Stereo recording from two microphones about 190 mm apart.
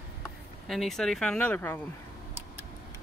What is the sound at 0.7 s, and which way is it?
Speech, centre (ahead or behind).